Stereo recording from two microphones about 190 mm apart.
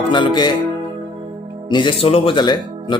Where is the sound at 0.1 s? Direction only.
25° left (ahead or behind).